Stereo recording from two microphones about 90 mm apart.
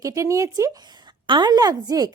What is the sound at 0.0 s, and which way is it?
A woman's voice, 35° right (ahead or behind).